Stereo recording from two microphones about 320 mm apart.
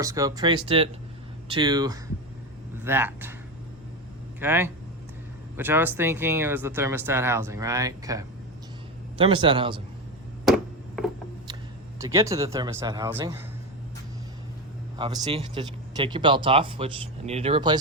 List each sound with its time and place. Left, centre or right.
0.0 s speech: centre
4.4 s speech: centre
11.9 s speech: centre
14.9 s speech: centre